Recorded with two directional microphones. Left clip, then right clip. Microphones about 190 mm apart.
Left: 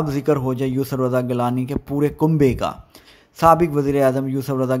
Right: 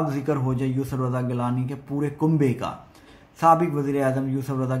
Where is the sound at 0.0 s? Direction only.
45° left (ahead or behind).